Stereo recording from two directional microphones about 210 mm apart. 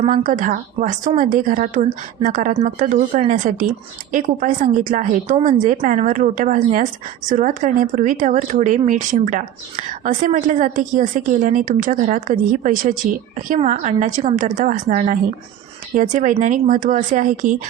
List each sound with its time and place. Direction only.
0.2 s speech: 40° right (ahead or behind)